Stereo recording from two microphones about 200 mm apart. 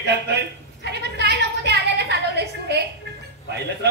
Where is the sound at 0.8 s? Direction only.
55° right (ahead or behind).